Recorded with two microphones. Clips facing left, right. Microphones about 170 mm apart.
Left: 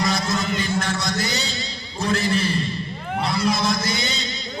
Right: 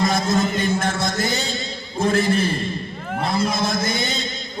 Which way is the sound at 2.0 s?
50° right (ahead or behind).